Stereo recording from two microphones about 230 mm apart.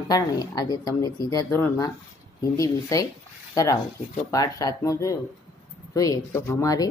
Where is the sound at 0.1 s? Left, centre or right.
Centre.